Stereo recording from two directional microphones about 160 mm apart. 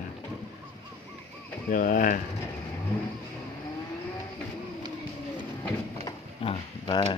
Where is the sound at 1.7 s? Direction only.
55° left (ahead or behind).